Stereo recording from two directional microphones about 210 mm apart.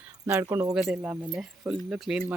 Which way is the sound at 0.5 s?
5° right (ahead or behind).